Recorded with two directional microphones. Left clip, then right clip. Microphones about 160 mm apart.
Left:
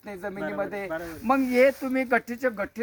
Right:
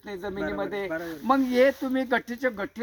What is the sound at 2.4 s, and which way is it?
Speech, 30° left (ahead or behind).